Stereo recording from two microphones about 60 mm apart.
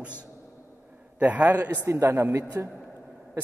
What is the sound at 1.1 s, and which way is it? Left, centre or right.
Speech, right.